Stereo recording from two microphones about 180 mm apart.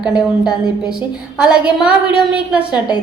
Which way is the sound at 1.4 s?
5° right (ahead or behind).